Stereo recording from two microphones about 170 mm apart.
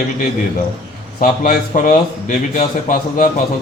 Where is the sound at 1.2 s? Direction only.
50° left (ahead or behind).